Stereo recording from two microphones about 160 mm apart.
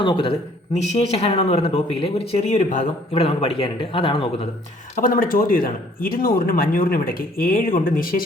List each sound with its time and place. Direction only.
0.0 s speech: 30° left (ahead or behind)
0.7 s speech: 40° left (ahead or behind)
4.9 s speech: 60° left (ahead or behind)